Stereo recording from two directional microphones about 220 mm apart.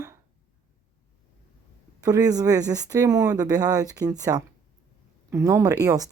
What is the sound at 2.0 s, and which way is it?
Speech, 15° right (ahead or behind).